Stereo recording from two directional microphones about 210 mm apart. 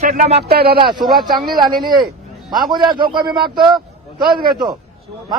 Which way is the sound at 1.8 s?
20° right (ahead or behind).